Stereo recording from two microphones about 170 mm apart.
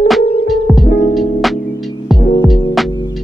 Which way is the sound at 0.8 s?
60° left (ahead or behind).